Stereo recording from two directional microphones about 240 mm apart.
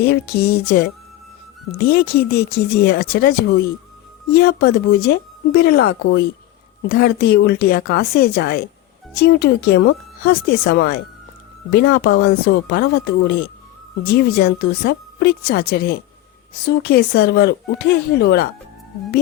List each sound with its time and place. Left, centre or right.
0.0 s speech: left
4.4 s speech: left